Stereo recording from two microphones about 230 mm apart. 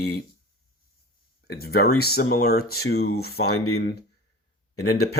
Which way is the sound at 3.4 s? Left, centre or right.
Left.